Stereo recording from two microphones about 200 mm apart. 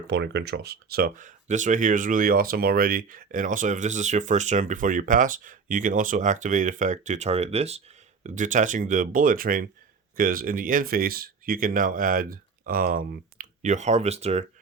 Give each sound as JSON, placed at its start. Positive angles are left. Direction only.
{"t": 0.1, "sound": "speech", "side_deg": -55}